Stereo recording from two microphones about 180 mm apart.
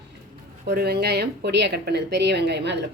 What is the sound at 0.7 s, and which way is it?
A woman's voice, 65° right (ahead or behind).